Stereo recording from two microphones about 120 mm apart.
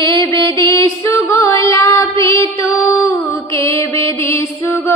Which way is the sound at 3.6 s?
45° right (ahead or behind).